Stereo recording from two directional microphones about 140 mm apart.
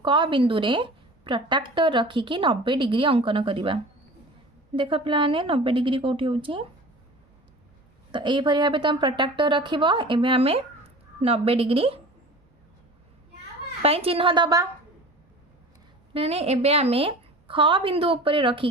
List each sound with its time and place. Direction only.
0.0 s a woman's voice: 35° right (ahead or behind)
8.1 s a woman's voice: 35° right (ahead or behind)
13.8 s a woman's voice: 45° right (ahead or behind); by 14.7 s 30° right (ahead or behind)
16.1 s a woman's voice: 45° right (ahead or behind)